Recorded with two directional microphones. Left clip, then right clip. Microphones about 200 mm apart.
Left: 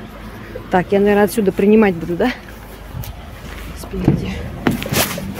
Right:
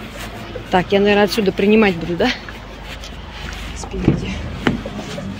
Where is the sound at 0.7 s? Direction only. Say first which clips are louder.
Even; 25° left (ahead or behind).